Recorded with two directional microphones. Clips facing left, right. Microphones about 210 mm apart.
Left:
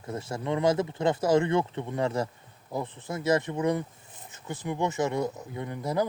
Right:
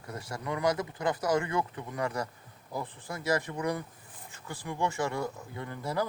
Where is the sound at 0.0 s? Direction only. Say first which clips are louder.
Left 5 dB; 25° left (ahead or behind).